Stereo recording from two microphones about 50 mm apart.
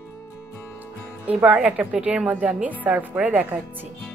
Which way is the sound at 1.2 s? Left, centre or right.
Right.